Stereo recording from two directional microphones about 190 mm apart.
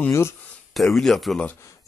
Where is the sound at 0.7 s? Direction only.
Centre (ahead or behind).